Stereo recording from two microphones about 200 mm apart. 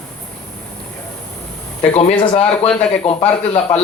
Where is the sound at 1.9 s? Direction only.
30° left (ahead or behind).